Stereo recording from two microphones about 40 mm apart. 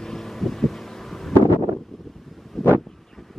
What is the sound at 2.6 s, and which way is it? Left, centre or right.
Vehicle, centre.